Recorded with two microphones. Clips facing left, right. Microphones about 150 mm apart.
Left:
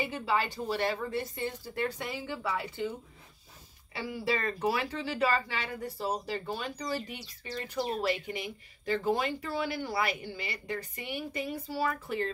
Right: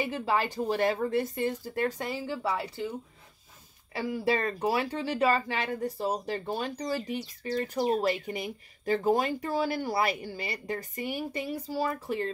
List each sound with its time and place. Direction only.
0.2 s speech: 40° right (ahead or behind)
3.9 s speech: 40° right (ahead or behind)